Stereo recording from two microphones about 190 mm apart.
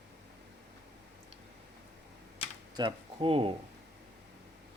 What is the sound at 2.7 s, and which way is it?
Speech, 25° right (ahead or behind).